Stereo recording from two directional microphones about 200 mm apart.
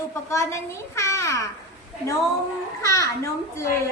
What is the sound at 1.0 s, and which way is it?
Babbling, 15° left (ahead or behind).